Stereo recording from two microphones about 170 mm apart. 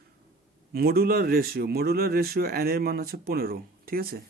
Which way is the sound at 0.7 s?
65° right (ahead or behind).